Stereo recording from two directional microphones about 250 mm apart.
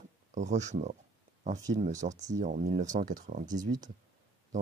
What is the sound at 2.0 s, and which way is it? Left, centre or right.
Speech, right.